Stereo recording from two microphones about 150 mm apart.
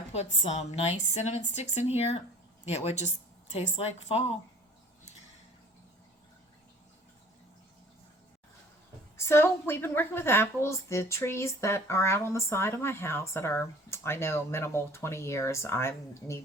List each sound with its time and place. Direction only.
0.1 s a woman's voice: 45° left (ahead or behind)
9.1 s a woman's voice: 15° left (ahead or behind)